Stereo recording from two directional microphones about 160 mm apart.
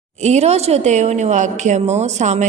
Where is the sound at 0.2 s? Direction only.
45° right (ahead or behind).